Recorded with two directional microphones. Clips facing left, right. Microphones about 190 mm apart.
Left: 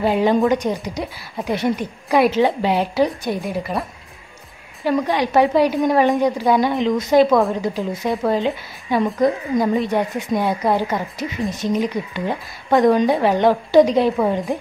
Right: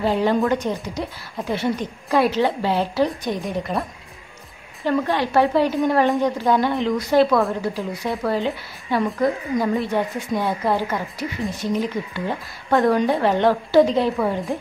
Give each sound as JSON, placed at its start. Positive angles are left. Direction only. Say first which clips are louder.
{"t": 0.0, "sound": "speech", "louder": "left 3 dB", "side_deg": 15}
{"t": 3.3, "sound": "a woman's voice", "louder": "left 1 dB", "side_deg": 0}
{"t": 4.8, "sound": "speech", "louder": "left 2 dB", "side_deg": 15}